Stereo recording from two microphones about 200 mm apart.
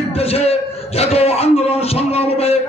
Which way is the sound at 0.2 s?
30° left (ahead or behind).